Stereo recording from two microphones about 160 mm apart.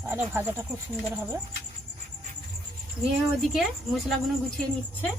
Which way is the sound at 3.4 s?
Centre (ahead or behind).